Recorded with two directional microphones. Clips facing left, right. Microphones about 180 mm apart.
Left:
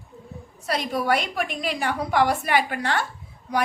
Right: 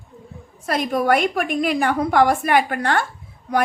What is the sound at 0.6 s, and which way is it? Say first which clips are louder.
A woman's voice: right 5 dB; 50° right (ahead or behind).